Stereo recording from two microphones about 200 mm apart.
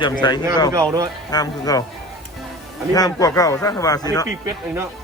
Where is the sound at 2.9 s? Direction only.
20° left (ahead or behind).